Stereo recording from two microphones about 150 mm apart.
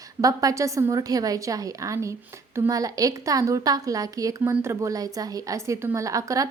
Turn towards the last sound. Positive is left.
turn(degrees=-20)  # may be behind; listen again after turning